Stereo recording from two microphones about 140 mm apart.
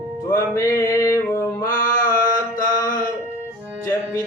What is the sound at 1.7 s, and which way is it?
Mantra, 75° left (ahead or behind).